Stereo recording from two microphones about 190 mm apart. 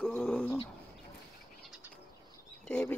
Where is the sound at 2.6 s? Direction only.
10° left (ahead or behind).